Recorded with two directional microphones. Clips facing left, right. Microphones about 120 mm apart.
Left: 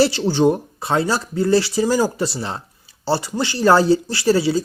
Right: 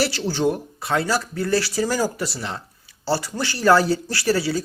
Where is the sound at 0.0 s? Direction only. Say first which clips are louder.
Left 6 dB; 20° left (ahead or behind).